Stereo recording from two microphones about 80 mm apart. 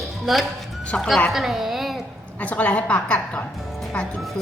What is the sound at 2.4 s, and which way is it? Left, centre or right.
A woman's voice, centre.